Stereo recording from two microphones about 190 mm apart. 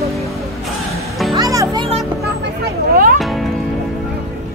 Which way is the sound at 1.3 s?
20° right (ahead or behind).